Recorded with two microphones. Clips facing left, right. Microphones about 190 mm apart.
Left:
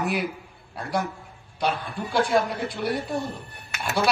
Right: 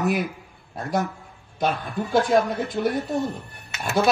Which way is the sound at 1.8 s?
45° right (ahead or behind).